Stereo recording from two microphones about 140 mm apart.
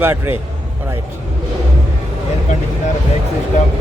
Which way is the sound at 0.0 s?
15° right (ahead or behind).